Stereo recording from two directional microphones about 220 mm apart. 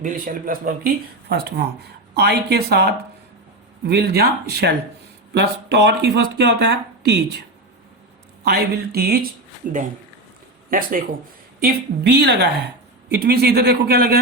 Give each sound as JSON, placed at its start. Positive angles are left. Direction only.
{"t": 0.0, "sound": "speech", "side_deg": -35}
{"t": 8.4, "sound": "speech", "side_deg": -45}
{"t": 10.7, "sound": "speech", "side_deg": -40}